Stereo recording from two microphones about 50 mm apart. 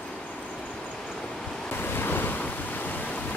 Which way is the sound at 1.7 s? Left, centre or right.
Left.